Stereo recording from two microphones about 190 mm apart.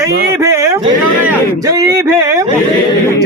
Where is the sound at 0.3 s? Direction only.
15° right (ahead or behind).